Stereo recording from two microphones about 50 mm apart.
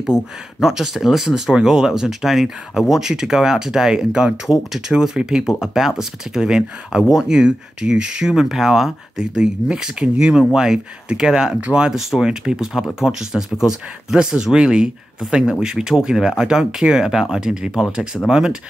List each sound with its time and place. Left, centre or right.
0.0 s speech: centre
9.2 s speech: centre
12.0 s speech: centre